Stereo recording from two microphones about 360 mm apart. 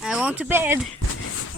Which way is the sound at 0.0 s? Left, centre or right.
Centre.